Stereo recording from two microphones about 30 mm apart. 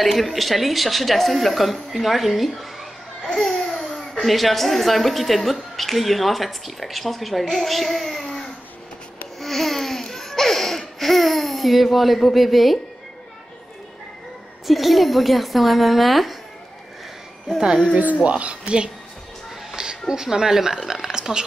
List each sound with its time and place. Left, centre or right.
0.0 s a child's voice: centre
9.4 s a sound: centre
10.1 s laughter: centre
12.2 s speech: centre
14.7 s speech: centre
18.2 s speech: right
19.7 s speech: right